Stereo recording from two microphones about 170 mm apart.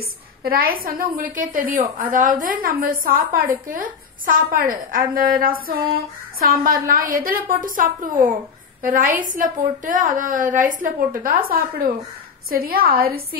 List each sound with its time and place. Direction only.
0.4 s a woman's voice: 60° right (ahead or behind)